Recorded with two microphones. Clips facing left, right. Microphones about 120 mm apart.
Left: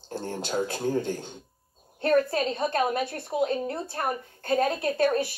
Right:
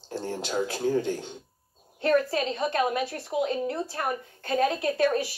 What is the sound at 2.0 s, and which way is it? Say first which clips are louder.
A woman's voice: left 1 dB; 40° left (ahead or behind).